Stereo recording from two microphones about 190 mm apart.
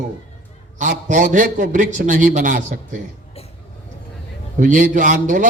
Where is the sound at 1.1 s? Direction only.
40° right (ahead or behind).